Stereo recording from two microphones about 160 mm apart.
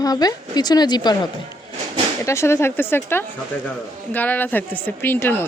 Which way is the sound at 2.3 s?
15° left (ahead or behind).